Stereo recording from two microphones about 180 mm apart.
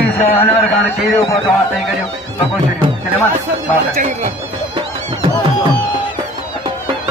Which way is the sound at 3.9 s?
45° right (ahead or behind).